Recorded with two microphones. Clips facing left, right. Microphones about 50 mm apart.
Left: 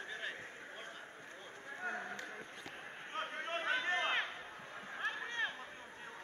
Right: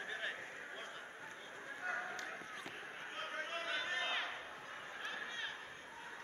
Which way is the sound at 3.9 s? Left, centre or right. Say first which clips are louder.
Left 4 dB; left.